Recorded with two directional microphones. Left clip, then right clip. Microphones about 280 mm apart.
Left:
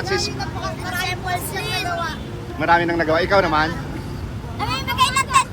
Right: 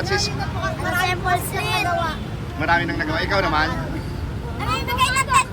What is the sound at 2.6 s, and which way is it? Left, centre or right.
Speech, centre.